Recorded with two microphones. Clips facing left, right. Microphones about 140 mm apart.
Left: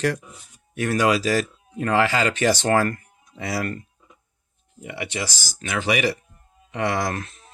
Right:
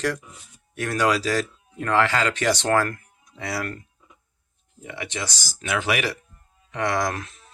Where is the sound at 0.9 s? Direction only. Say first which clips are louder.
Left 2 dB; 10° left (ahead or behind).